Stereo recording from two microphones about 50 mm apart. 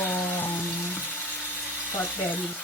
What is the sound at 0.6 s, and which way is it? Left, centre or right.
Frying, left.